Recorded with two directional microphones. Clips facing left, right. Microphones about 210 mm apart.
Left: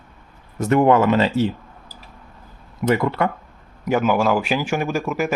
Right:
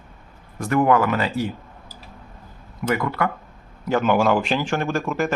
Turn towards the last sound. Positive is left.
turn(degrees=10)  # may be behind; listen again after turning